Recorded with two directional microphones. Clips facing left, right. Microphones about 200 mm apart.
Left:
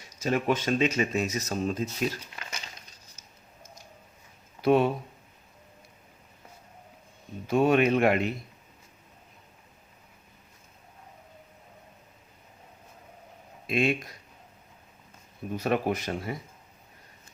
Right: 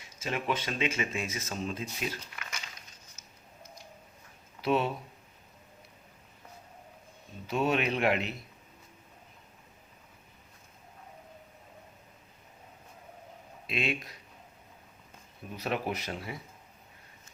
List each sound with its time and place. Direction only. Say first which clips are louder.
0.2 s speech: left 6 dB; 45° left (ahead or behind)
2.3 s crumpling: left 3 dB; 30° left (ahead or behind)
4.6 s a man's voice: left 6 dB; 50° left (ahead or behind)
7.4 s a man's voice: left 7 dB; 50° left (ahead or behind)
13.7 s a man's voice: left 7 dB; 45° left (ahead or behind)
15.5 s a man's voice: left 6 dB; 50° left (ahead or behind)